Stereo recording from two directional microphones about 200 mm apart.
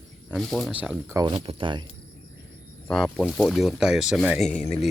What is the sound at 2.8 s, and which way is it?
Speech, 5° left (ahead or behind).